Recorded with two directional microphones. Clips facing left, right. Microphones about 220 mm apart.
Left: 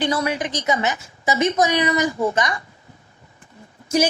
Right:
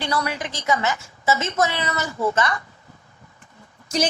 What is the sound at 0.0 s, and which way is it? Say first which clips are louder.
A woman's voice: left 4 dB; 20° left (ahead or behind).